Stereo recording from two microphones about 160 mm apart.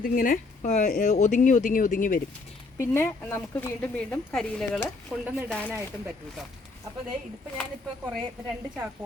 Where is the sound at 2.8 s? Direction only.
15° left (ahead or behind); by 5.3 s 5° right (ahead or behind).